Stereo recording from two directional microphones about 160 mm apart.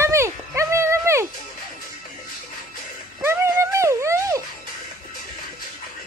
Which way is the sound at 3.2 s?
15° right (ahead or behind).